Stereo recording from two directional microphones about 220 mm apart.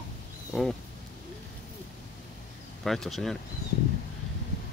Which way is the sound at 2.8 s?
Centre (ahead or behind).